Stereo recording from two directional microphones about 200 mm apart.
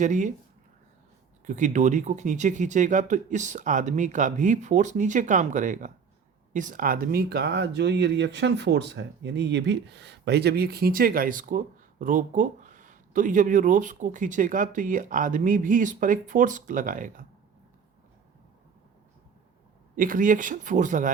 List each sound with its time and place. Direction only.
0.0 s speech: 40° right (ahead or behind)
1.5 s speech: 40° right (ahead or behind)
20.0 s speech: 40° right (ahead or behind)